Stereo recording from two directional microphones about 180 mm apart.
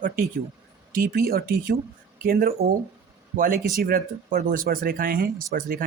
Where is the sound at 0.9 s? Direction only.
55° right (ahead or behind).